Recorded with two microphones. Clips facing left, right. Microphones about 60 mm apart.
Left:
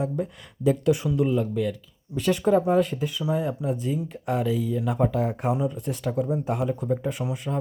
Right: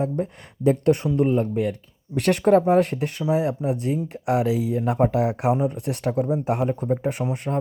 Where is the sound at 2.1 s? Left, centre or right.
Right.